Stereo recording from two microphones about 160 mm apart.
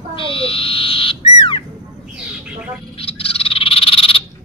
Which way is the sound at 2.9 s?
35° left (ahead or behind).